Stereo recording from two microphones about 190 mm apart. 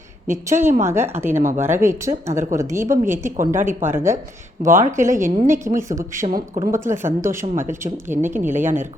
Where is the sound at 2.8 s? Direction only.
40° right (ahead or behind).